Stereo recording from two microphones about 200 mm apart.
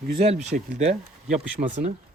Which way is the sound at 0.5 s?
50° right (ahead or behind).